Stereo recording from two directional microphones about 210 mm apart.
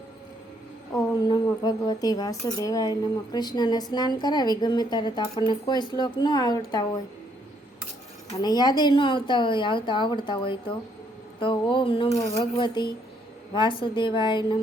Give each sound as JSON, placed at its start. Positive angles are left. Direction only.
{"t": 0.9, "sound": "a woman's voice", "side_deg": 20}
{"t": 8.4, "sound": "a woman's voice", "side_deg": 20}